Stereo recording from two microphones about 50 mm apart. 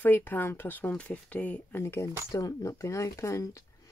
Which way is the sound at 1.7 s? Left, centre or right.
Left.